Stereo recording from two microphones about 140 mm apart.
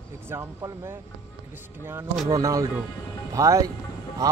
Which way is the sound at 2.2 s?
25° right (ahead or behind).